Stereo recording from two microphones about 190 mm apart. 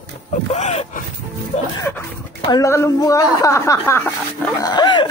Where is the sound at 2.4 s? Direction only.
20° left (ahead or behind).